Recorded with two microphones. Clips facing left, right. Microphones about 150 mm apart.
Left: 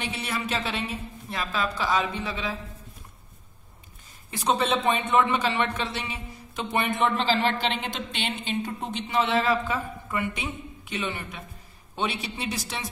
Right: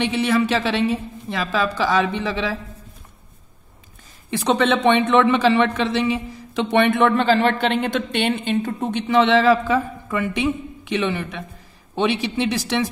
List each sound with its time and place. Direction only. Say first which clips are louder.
0.0 s a woman's voice: right 12 dB; 90° right
4.3 s a man's voice: right 6 dB; 85° right